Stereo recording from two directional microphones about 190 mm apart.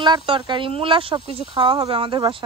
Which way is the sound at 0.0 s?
25° right (ahead or behind).